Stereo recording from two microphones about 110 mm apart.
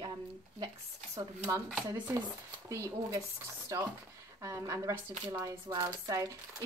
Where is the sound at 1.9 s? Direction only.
30° right (ahead or behind).